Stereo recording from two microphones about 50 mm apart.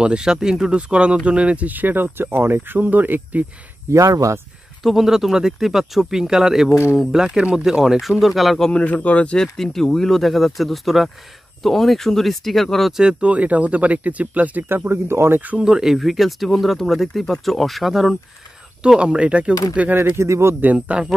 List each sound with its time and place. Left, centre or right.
0.0 s speech: centre
1.7 s speech: right
3.9 s speech: right
4.8 s speech: centre
8.7 s a man's voice: left
9.4 s speech: centre
13.2 s speech: right
14.9 s speech: right
15.6 s speech: centre
18.8 s speech: centre
19.9 s speech: right
20.2 s speech: right
20.6 s speech: right